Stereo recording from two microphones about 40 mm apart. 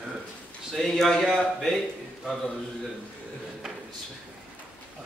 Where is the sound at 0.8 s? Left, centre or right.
Centre.